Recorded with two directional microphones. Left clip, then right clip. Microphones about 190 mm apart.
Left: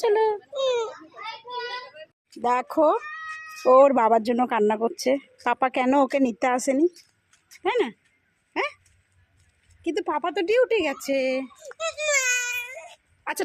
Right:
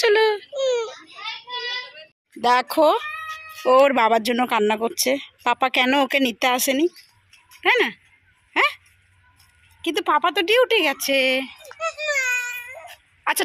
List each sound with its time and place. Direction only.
0.0 s whimper: 5° left (ahead or behind)
0.5 s baby cry: 25° left (ahead or behind)
1.1 s child singing: 50° left (ahead or behind)
2.4 s speech: 10° left (ahead or behind)
9.8 s speech: centre (ahead or behind)
11.9 s a sound: 30° left (ahead or behind)
13.3 s speech: centre (ahead or behind)